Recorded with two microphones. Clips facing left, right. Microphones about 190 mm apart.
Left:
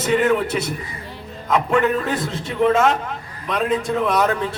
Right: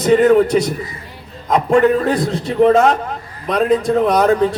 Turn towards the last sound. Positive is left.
turn(degrees=-40)  # may be behind; listen again after turning